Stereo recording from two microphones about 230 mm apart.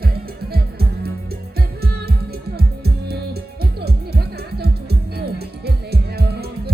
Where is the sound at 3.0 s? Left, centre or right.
Right.